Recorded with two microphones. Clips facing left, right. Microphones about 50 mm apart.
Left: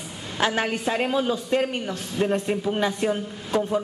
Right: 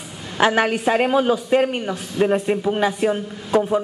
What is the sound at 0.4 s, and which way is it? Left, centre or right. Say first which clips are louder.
A woman's voice: right 6 dB; right.